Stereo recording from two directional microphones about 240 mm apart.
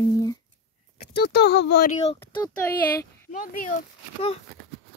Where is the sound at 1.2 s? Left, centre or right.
Left.